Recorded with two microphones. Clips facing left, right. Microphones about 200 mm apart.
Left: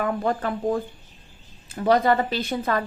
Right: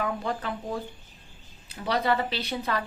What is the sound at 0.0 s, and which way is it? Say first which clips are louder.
A woman's voice: left 6 dB; 50° left (ahead or behind).